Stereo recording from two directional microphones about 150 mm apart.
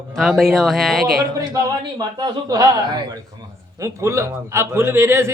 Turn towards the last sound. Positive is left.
turn(degrees=-15)  # may be behind; listen again after turning